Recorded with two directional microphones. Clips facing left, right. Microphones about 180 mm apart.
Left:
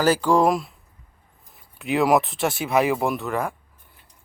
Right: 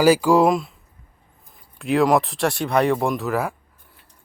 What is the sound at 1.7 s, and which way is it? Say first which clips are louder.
Speech: right 2 dB; centre (ahead or behind).